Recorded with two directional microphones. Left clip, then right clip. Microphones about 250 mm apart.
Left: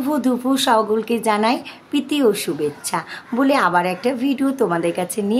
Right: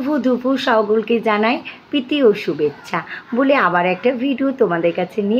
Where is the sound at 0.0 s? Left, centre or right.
Centre.